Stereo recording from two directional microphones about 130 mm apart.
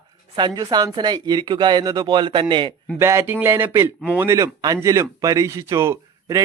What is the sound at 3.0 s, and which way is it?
A man's voice, 20° right (ahead or behind).